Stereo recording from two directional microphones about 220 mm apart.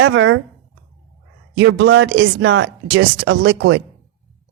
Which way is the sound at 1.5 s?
55° right (ahead or behind).